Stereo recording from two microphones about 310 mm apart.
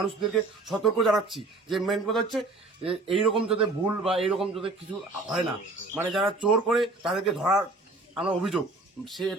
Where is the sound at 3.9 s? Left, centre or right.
Centre.